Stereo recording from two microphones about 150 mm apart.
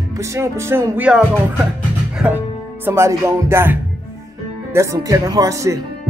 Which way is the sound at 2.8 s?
15° right (ahead or behind).